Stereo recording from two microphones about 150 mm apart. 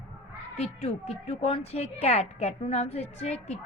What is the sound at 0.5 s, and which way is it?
Speech, 45° left (ahead or behind).